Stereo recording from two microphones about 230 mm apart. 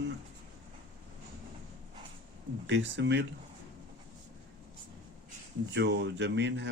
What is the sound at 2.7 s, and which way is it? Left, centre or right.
Speech, right.